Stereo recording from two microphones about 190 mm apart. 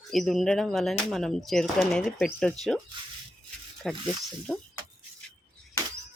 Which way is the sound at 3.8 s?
Centre (ahead or behind).